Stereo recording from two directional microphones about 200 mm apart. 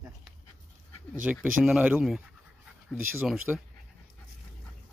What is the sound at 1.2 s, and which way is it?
Speech, 5° right (ahead or behind).